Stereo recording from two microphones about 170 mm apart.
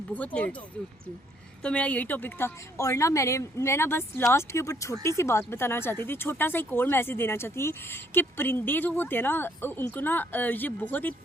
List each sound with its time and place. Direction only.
0.4 s speech: 10° left (ahead or behind)
1.6 s speech: 5° left (ahead or behind)